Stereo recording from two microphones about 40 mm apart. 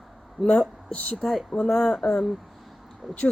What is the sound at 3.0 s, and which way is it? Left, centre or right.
Speech, centre.